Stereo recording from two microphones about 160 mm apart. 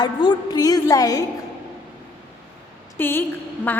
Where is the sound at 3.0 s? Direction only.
15° left (ahead or behind).